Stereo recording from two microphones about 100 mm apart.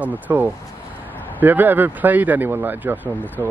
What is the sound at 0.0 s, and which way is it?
Speech, 15° right (ahead or behind).